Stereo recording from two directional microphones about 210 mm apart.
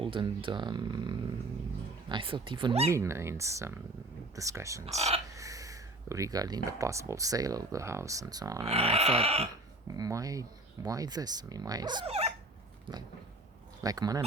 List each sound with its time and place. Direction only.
0.0 s speech: 25° right (ahead or behind)
2.9 s speech: 15° right (ahead or behind)
4.9 s speech: 30° right (ahead or behind)
5.3 s a sound: 15° right (ahead or behind)
7.1 s speech: 15° right (ahead or behind)
8.6 s speech: 30° right (ahead or behind)
9.9 s speech: 15° right (ahead or behind)
13.8 s speech: 15° right (ahead or behind)